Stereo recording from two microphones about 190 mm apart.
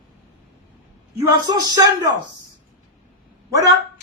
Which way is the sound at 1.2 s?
20° right (ahead or behind).